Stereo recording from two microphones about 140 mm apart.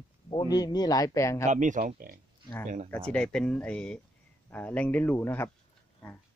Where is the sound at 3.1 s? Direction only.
5° left (ahead or behind).